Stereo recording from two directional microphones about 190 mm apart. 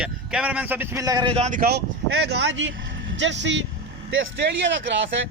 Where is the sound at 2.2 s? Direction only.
65° right (ahead or behind).